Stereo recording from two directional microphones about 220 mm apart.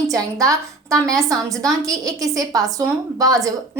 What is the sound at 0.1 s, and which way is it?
A woman's voice, 15° right (ahead or behind).